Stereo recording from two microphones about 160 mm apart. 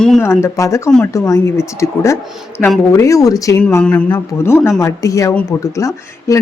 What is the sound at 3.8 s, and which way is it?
Speech, 5° left (ahead or behind).